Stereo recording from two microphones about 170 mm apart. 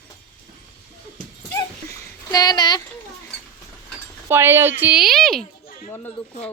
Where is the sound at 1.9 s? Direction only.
25° left (ahead or behind).